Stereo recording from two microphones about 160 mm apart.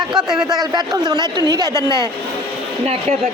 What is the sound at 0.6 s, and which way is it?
Speech, 25° right (ahead or behind).